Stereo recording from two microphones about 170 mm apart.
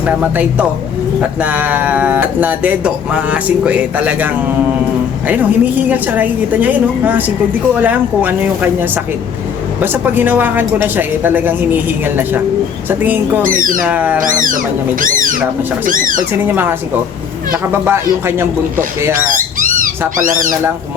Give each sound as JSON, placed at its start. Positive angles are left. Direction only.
{"t": 0.0, "sound": "speech", "side_deg": -10}
{"t": 5.3, "sound": "speech", "side_deg": -10}
{"t": 13.4, "sound": "speech", "side_deg": -55}
{"t": 13.8, "sound": "speech", "side_deg": -10}
{"t": 14.3, "sound": "speech", "side_deg": -50}
{"t": 16.4, "sound": "speech", "side_deg": -10}
{"t": 19.5, "sound": "cat", "side_deg": -50}